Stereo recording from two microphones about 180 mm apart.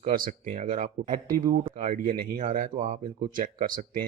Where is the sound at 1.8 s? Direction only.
50° right (ahead or behind).